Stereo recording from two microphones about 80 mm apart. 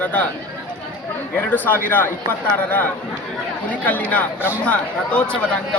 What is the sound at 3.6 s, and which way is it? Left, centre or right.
A man's voice, centre.